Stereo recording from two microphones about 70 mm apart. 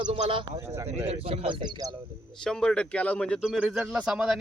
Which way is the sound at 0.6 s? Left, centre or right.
Right.